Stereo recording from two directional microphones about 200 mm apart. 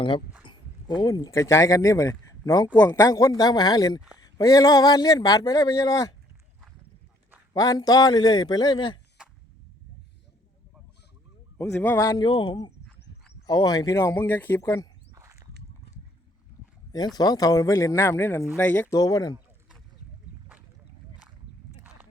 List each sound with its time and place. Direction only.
0.4 s a sound: 25° left (ahead or behind)
1.0 s a man's voice: 15° left (ahead or behind)
7.5 s a man's voice: 20° left (ahead or behind)
11.5 s speech: 10° left (ahead or behind)
15.1 s walk: 15° right (ahead or behind)
17.2 s speech: 20° left (ahead or behind)